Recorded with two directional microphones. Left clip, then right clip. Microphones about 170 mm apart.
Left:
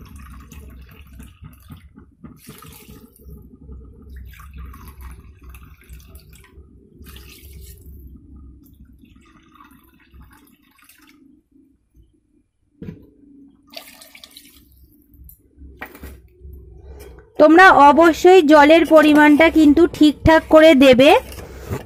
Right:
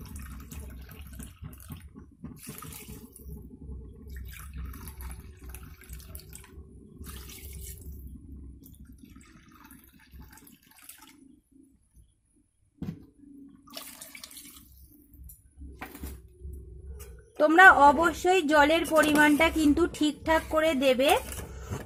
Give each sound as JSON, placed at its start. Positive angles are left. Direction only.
{"t": 0.0, "sound": "a sound", "side_deg": -10}
{"t": 17.3, "sound": "a woman's voice", "side_deg": 35}
{"t": 21.5, "sound": "vehicle", "side_deg": 30}